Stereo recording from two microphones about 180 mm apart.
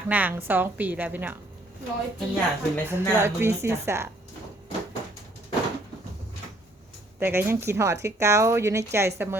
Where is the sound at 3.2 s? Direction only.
15° right (ahead or behind).